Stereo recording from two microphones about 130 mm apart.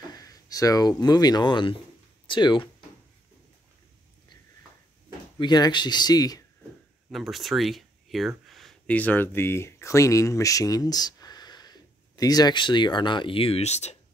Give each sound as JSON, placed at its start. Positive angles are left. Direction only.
{"t": 0.1, "sound": "speech", "side_deg": 30}
{"t": 5.4, "sound": "speech", "side_deg": 35}
{"t": 7.1, "sound": "speech", "side_deg": 0}